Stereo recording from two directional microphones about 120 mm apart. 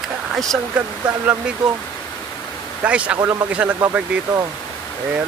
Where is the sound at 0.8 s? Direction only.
10° right (ahead or behind).